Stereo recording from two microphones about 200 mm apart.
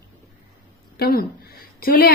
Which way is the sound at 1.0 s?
50° left (ahead or behind).